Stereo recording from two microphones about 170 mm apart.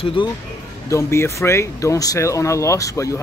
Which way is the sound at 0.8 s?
15° left (ahead or behind).